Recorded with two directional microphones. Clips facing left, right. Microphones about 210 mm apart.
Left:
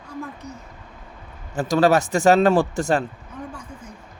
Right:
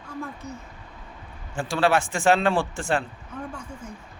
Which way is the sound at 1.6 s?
40° left (ahead or behind).